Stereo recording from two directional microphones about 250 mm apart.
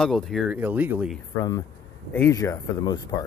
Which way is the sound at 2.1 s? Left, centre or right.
Centre.